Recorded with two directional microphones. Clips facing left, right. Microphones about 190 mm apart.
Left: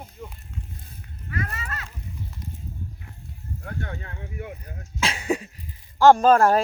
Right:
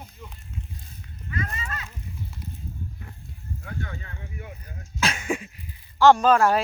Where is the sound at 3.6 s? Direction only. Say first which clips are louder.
Left 2 dB; 60° left (ahead or behind).